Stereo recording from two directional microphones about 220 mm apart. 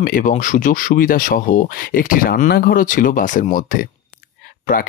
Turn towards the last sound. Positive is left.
turn(degrees=40)  # may be behind; listen again after turning